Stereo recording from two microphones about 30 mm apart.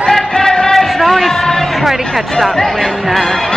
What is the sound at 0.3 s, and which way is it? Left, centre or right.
Music, left.